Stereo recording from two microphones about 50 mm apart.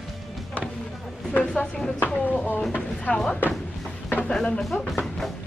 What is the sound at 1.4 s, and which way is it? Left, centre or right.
Speech, centre.